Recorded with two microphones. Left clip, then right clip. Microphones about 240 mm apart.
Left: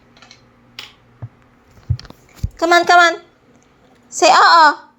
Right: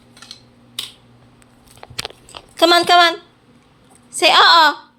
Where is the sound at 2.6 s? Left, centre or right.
Right.